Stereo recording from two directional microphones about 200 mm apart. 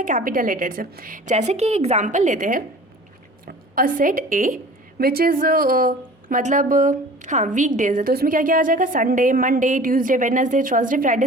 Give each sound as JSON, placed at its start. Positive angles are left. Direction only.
{"t": 0.0, "sound": "a woman's voice", "side_deg": -40}